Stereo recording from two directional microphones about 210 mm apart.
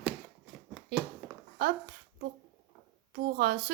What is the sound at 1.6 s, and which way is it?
Speech, 45° right (ahead or behind).